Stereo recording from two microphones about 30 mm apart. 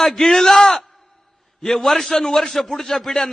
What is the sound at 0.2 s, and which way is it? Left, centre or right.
Speech, centre.